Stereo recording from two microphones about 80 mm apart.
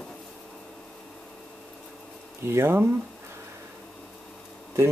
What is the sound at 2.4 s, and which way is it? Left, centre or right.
Speech, right.